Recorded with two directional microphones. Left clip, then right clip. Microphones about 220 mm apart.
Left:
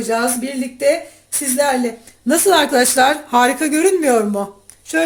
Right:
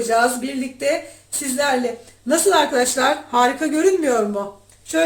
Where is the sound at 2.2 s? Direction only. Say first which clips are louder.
Left 3 dB; 50° left (ahead or behind).